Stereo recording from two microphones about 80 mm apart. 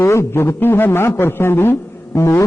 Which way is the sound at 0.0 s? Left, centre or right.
Left.